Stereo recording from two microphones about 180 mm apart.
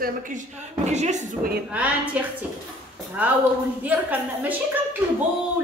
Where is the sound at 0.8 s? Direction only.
40° right (ahead or behind).